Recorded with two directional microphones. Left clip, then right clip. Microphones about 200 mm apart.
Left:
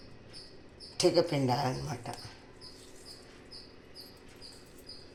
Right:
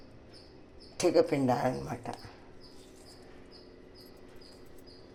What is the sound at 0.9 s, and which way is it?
A woman's voice, 40° right (ahead or behind).